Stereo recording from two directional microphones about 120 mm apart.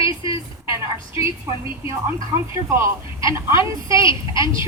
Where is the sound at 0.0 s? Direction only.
45° left (ahead or behind).